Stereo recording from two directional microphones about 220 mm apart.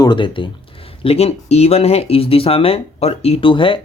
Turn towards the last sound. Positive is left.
turn(degrees=25)  # may be behind; listen again after turning